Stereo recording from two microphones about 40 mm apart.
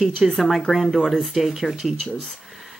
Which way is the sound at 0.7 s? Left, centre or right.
Centre.